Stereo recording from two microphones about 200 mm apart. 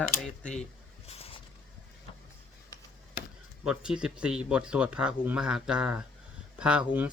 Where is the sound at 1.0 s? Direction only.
30° left (ahead or behind).